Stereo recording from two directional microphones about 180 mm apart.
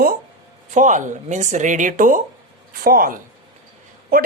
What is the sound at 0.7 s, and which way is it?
Speech, 45° right (ahead or behind).